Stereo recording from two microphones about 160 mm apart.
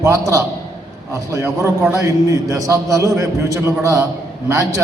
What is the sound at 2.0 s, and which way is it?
A man's voice, 20° right (ahead or behind).